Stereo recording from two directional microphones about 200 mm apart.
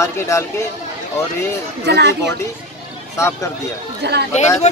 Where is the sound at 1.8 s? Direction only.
60° right (ahead or behind).